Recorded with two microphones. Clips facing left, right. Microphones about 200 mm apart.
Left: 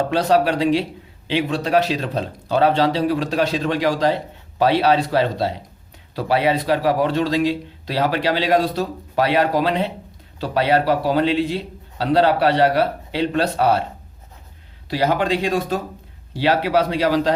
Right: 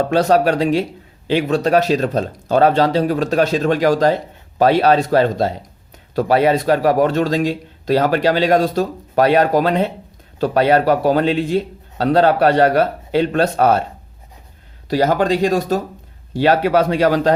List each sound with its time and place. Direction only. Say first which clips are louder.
0.1 s speech: right 4 dB; 45° right (ahead or behind)
14.8 s speech: right 4 dB; 45° right (ahead or behind)